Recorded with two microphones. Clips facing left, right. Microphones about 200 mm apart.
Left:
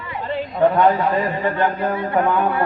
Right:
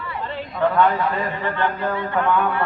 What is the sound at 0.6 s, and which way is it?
A man's voice, 25° left (ahead or behind).